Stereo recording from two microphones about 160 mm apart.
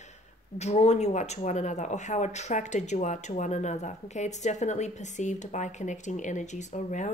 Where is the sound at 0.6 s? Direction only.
45° left (ahead or behind).